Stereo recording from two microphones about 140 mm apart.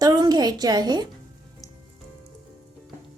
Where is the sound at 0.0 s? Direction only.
30° right (ahead or behind).